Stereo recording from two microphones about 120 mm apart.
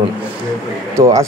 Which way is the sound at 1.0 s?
25° right (ahead or behind).